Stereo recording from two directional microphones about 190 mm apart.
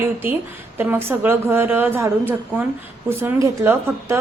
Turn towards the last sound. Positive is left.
turn(degrees=-15)  # may be behind; listen again after turning